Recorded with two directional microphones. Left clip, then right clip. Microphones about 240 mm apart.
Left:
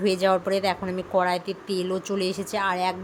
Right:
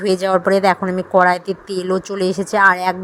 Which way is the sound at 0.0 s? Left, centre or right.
Right.